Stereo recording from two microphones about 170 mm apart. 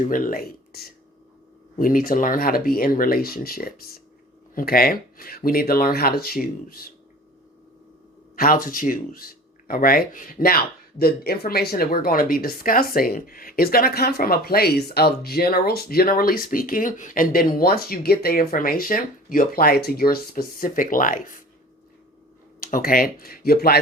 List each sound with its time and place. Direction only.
0.0 s speech: 50° left (ahead or behind)
8.4 s speech: 55° left (ahead or behind)
22.6 s speech: 55° left (ahead or behind)